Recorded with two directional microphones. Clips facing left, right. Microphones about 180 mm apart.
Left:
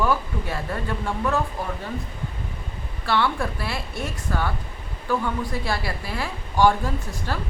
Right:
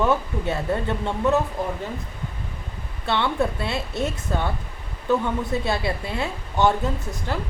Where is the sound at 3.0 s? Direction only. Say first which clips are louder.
Right 1 dB; 20° right (ahead or behind).